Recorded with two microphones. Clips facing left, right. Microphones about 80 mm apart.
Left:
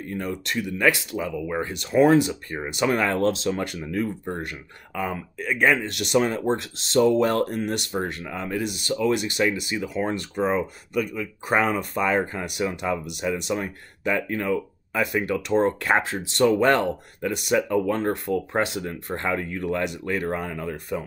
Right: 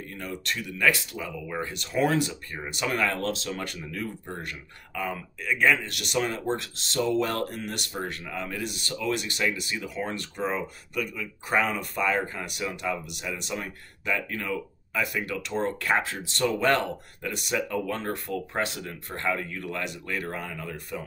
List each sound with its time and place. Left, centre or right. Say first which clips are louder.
0.1 s speech: left 6 dB; left